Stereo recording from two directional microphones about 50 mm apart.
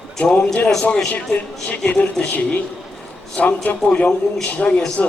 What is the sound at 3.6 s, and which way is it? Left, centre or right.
Speech, left.